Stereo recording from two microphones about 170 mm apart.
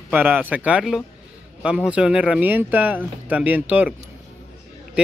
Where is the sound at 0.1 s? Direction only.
10° right (ahead or behind).